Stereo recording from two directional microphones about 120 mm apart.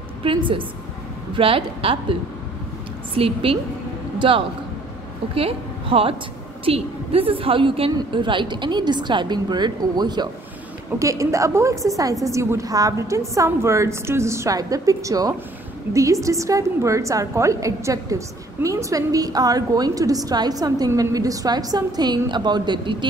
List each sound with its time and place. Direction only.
0.2 s a woman's voice: 45° right (ahead or behind)
3.2 s a woman's voice: 50° right (ahead or behind); by 10.3 s 35° right (ahead or behind)
11.0 s a woman's voice: 25° right (ahead or behind)